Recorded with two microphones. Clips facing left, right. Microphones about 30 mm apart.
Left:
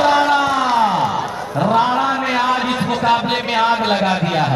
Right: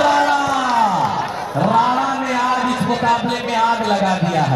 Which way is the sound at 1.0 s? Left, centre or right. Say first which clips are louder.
Even; right.